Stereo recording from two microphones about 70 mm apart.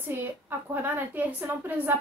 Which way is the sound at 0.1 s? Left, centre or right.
Right.